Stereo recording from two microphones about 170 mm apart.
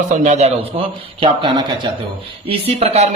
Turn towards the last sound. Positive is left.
turn(degrees=-35)  # may be behind; listen again after turning